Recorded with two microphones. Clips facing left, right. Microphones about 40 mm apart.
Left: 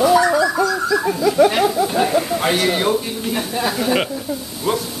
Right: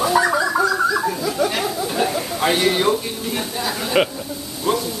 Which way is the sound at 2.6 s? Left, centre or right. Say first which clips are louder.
Even; centre.